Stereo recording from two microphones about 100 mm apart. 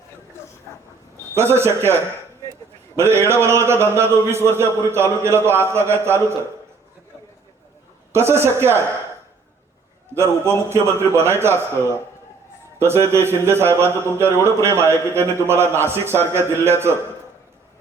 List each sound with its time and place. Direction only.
1.4 s a man's voice: 25° right (ahead or behind)
3.0 s a man's voice: 25° right (ahead or behind)
8.1 s a man's voice: 25° right (ahead or behind)
10.2 s a man's voice: 25° right (ahead or behind)
12.8 s a man's voice: 25° right (ahead or behind)